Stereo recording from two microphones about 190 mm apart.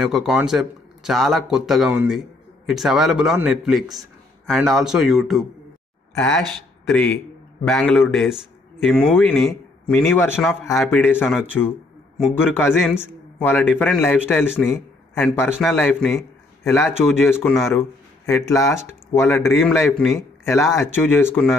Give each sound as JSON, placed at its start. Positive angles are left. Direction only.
{"t": 0.0, "sound": "a man's voice", "side_deg": 0}
{"t": 13.4, "sound": "a man's voice", "side_deg": 10}
{"t": 15.4, "sound": "a man's voice", "side_deg": 0}
{"t": 17.2, "sound": "a man's voice", "side_deg": 10}
{"t": 20.2, "sound": "speech", "side_deg": 15}